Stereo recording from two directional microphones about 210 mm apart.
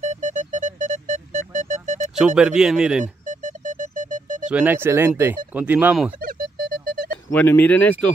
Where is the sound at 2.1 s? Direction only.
5° right (ahead or behind).